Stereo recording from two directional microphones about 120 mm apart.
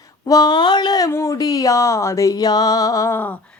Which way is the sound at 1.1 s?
25° left (ahead or behind).